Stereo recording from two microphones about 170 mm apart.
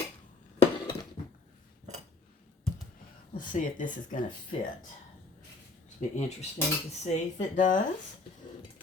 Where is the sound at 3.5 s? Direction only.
50° left (ahead or behind).